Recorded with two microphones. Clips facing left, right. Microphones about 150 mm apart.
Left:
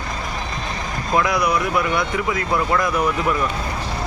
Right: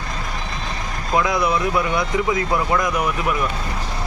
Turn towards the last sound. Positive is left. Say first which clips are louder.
# left 2 dB
turn(degrees=-15)  # may be behind; listen again after turning